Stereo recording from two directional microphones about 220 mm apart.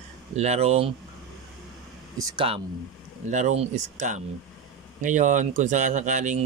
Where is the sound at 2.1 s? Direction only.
25° right (ahead or behind).